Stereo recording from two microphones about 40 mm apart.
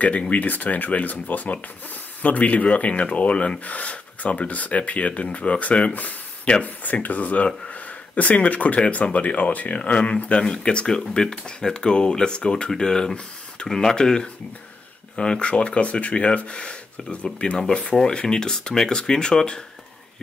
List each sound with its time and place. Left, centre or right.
0.3 s speech: left
5.9 s a sound: left
6.6 s speech: left
10.4 s speech: left